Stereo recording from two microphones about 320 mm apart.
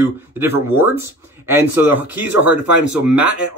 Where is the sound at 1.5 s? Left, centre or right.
Centre.